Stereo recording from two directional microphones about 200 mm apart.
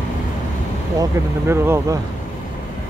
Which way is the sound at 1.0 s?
10° right (ahead or behind).